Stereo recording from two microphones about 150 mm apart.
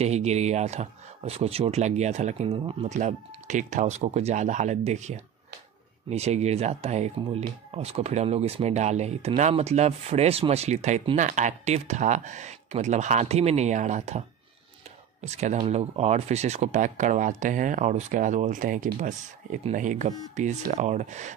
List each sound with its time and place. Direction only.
0.0 s speech: 45° right (ahead or behind)
2.9 s speech: 50° right (ahead or behind)
15.2 s speech: 50° right (ahead or behind)